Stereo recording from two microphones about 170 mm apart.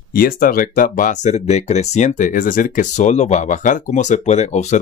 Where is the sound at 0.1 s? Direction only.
55° left (ahead or behind).